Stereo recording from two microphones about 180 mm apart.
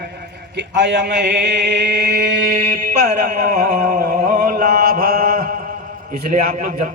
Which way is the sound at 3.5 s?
55° right (ahead or behind).